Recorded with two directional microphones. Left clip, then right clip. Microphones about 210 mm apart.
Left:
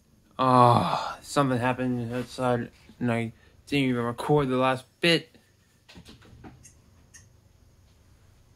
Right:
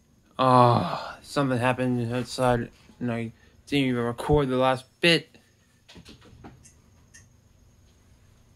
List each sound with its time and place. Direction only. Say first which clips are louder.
0.4 s a sound: right 1 dB; 5° right (ahead or behind)
0.7 s speech: left 2 dB; 15° left (ahead or behind)
1.5 s speech: right 2 dB; 10° right (ahead or behind)
1.8 s speech: right 3 dB; 25° right (ahead or behind)
3.0 s speech: left 3 dB; 25° left (ahead or behind)
3.4 s speech: right 2 dB; 10° left (ahead or behind)